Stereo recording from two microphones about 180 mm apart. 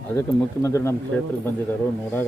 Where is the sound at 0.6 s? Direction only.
15° left (ahead or behind).